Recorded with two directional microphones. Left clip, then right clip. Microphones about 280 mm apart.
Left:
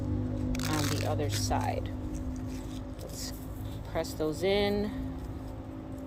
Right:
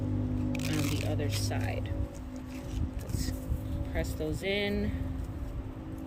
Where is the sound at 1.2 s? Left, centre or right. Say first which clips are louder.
Left 4 dB; centre.